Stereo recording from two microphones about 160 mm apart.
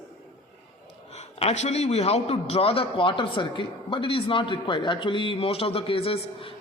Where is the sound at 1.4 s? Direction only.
40° left (ahead or behind).